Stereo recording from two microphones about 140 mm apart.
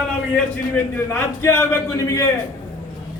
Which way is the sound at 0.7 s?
20° left (ahead or behind).